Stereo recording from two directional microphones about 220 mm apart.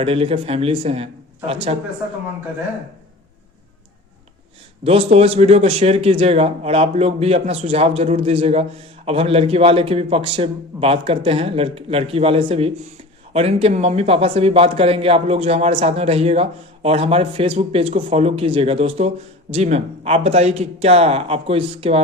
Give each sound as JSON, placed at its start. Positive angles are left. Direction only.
{"t": 0.0, "sound": "speech", "side_deg": -25}
{"t": 4.8, "sound": "speech", "side_deg": -25}